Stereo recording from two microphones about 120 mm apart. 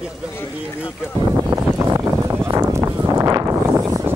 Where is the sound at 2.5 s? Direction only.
25° right (ahead or behind).